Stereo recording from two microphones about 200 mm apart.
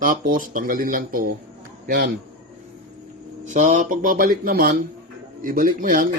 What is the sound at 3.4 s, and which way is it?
A man's voice, 40° right (ahead or behind).